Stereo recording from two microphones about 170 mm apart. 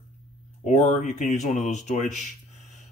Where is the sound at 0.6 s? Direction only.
45° left (ahead or behind).